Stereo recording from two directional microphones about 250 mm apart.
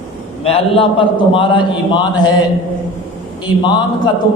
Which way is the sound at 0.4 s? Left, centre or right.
Left.